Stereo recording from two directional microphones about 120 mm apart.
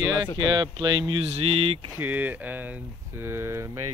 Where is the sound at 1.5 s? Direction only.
55° right (ahead or behind).